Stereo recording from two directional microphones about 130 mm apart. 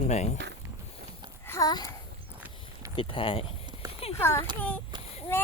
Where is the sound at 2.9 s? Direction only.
40° left (ahead or behind).